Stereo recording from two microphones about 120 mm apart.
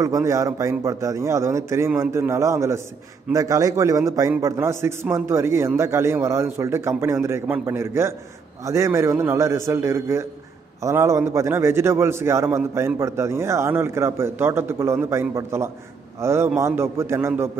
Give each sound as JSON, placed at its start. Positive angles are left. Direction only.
{"t": 0.0, "sound": "a man's voice", "side_deg": -25}